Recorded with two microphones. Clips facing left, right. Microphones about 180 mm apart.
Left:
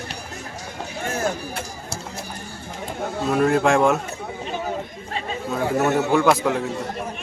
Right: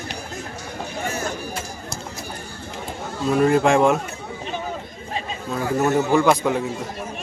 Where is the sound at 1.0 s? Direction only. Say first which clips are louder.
Left 4 dB; 55° left (ahead or behind).